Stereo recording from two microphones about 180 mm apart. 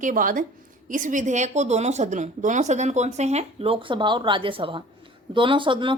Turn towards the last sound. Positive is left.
turn(degrees=-25)  # may be behind; listen again after turning